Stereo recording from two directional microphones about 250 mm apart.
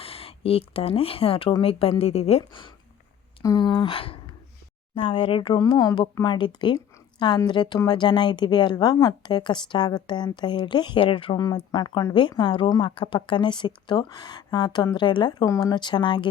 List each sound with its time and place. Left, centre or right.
0.0 s speech: left